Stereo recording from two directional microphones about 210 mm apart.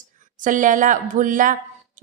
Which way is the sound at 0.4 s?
40° right (ahead or behind).